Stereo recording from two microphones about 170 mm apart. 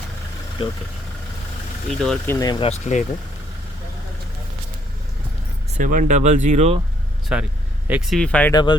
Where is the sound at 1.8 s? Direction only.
5° left (ahead or behind).